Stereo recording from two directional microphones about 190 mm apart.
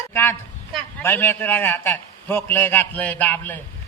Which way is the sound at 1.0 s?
10° left (ahead or behind).